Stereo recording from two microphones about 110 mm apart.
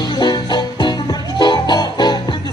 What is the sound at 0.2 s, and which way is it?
Music, 40° left (ahead or behind).